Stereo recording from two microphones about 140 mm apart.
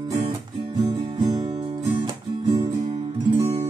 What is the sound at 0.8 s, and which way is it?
Music, 35° right (ahead or behind).